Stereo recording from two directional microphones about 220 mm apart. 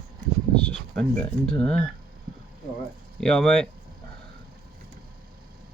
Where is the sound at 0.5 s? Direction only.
5° left (ahead or behind).